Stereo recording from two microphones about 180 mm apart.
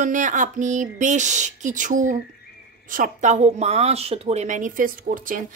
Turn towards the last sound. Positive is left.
turn(degrees=-50)  # may be behind; listen again after turning